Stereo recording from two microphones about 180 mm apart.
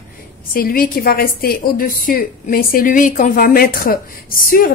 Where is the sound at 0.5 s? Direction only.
55° left (ahead or behind).